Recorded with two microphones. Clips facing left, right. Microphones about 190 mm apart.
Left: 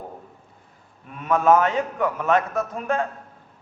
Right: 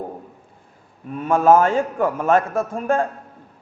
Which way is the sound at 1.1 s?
30° right (ahead or behind).